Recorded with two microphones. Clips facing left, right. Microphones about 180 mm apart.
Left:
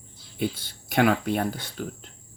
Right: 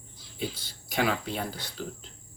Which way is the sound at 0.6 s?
55° left (ahead or behind).